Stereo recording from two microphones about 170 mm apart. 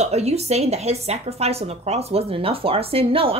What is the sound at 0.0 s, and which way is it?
Speech, 40° right (ahead or behind).